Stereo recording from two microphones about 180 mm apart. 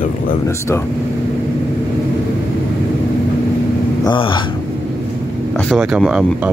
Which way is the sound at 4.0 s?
25° left (ahead or behind).